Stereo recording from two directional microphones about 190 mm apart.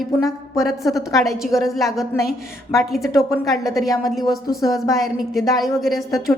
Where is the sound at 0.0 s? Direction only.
Centre (ahead or behind).